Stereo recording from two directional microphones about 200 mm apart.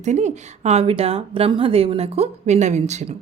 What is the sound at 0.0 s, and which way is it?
Speech, 35° right (ahead or behind).